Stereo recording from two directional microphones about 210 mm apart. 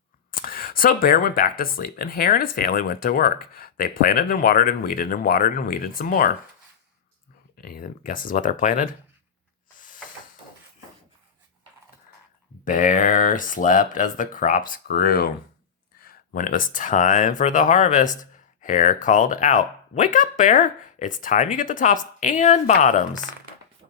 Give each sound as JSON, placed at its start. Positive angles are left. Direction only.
{"t": 0.3, "sound": "speech", "side_deg": 45}
{"t": 7.6, "sound": "speech", "side_deg": 45}
{"t": 9.7, "sound": "a sound", "side_deg": 40}
{"t": 12.6, "sound": "speech", "side_deg": 40}